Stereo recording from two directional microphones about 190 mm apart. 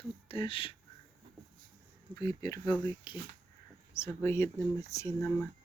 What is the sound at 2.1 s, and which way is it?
Speech, 20° left (ahead or behind).